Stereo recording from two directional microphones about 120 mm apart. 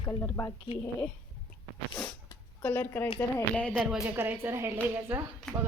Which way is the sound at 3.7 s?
5° right (ahead or behind).